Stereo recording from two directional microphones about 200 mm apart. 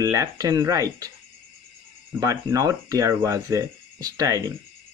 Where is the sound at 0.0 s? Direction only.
15° right (ahead or behind).